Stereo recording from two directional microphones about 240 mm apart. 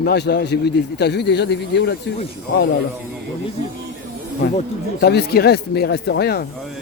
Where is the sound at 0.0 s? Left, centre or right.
Left.